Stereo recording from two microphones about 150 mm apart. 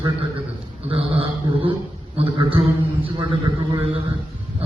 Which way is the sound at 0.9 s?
40° right (ahead or behind).